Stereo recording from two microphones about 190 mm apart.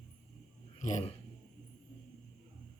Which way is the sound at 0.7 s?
40° left (ahead or behind).